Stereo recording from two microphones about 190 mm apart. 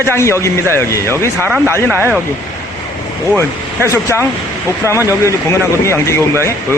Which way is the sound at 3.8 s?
15° left (ahead or behind).